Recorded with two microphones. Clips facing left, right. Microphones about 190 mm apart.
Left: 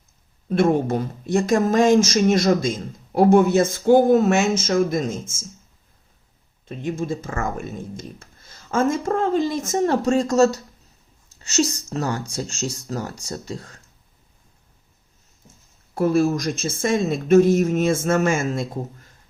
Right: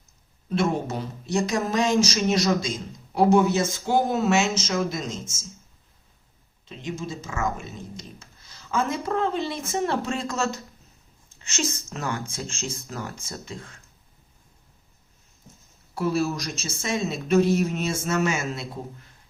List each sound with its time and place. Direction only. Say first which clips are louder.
0.4 s speech: left 6 dB; 50° left (ahead or behind)
6.7 s speech: left 7 dB; 55° left (ahead or behind); by 13.8 s 40° left (ahead or behind)
16.0 s speech: left 6 dB; 50° left (ahead or behind)